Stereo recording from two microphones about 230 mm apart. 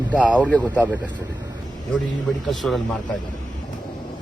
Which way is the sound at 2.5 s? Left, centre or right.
Centre.